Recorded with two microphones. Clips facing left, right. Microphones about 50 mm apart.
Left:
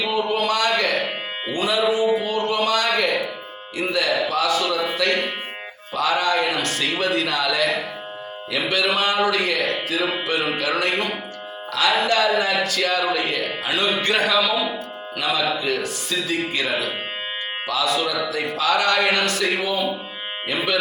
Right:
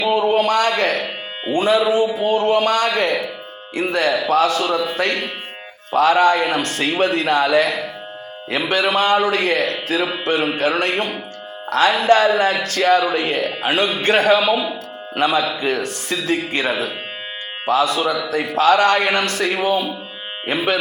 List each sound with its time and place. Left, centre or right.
0.1 s a sound: right
1.5 s a man's voice: right
12.0 s speech: right